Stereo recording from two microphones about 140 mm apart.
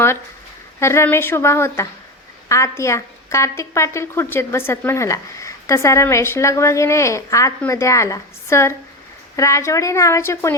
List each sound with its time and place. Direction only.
0.8 s a woman's voice: 20° left (ahead or behind)